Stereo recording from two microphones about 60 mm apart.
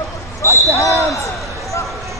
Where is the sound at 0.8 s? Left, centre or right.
Left.